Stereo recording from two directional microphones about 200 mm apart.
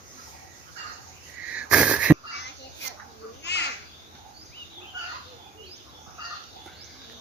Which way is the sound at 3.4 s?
60° left (ahead or behind).